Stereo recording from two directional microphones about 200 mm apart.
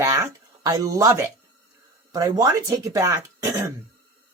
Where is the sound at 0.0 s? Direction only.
15° right (ahead or behind).